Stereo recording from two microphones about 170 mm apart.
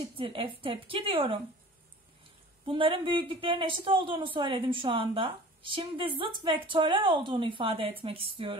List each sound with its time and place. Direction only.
0.0 s speech: 30° right (ahead or behind)
2.6 s speech: 30° right (ahead or behind)